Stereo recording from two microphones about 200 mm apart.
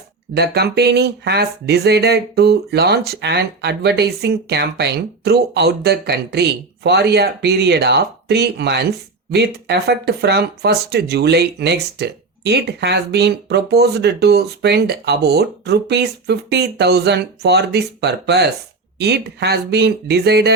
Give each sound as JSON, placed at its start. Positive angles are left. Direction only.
{"t": 0.3, "sound": "speech", "side_deg": -55}